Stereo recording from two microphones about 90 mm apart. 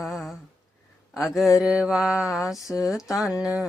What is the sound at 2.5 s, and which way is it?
Speech, 40° left (ahead or behind).